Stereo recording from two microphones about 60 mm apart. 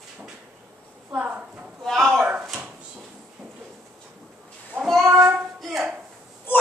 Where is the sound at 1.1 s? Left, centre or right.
Right.